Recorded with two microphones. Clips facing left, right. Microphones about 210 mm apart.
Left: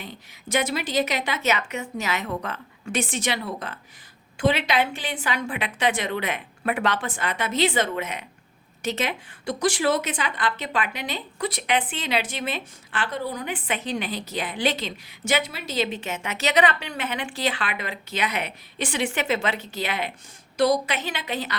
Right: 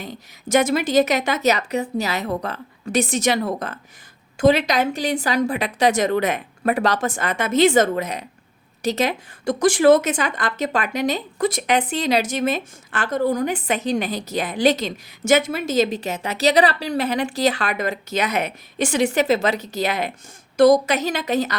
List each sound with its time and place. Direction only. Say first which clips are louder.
0.0 s a woman's voice: right 6 dB; 45° right (ahead or behind)